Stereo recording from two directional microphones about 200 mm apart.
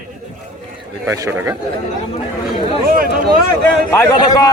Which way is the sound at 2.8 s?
45° right (ahead or behind).